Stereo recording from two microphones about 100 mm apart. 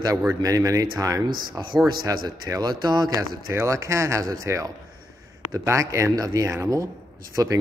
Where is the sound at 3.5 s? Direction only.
30° right (ahead or behind).